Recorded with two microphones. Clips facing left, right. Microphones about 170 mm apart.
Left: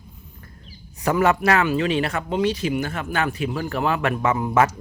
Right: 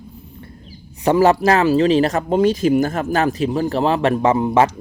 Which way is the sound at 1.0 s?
30° right (ahead or behind).